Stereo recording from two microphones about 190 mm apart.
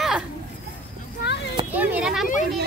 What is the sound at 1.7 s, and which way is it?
Speech, 5° right (ahead or behind).